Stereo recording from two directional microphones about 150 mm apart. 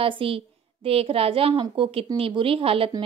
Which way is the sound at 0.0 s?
35° right (ahead or behind).